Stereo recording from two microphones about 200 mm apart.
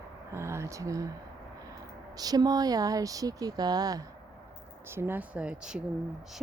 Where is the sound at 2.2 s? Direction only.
20° right (ahead or behind).